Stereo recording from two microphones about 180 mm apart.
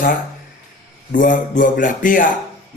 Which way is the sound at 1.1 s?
45° left (ahead or behind).